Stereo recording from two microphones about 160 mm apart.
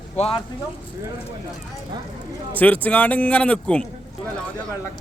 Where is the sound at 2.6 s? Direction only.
10° left (ahead or behind).